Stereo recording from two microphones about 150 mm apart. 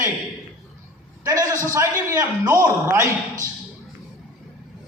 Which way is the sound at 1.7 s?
20° right (ahead or behind).